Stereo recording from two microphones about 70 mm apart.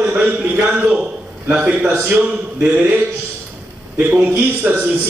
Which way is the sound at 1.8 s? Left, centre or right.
Right.